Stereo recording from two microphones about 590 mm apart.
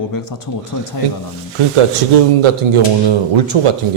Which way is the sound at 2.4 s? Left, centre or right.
Right.